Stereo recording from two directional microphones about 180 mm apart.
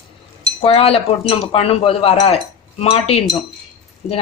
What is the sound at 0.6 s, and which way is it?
Speech, 35° left (ahead or behind).